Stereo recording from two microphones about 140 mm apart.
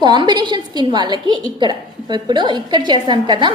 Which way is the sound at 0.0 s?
35° right (ahead or behind).